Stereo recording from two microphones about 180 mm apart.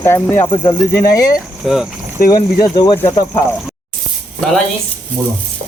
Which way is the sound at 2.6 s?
25° left (ahead or behind).